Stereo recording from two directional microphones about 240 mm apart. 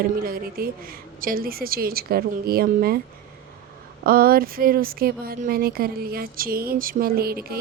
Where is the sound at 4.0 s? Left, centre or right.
Right.